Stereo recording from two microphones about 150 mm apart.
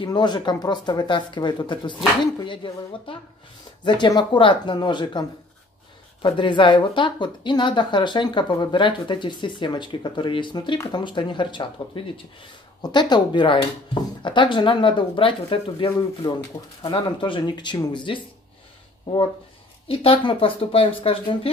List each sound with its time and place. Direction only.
0.0 s speech: 30° left (ahead or behind)
6.2 s speech: 35° left (ahead or behind)
19.9 s speech: 40° left (ahead or behind)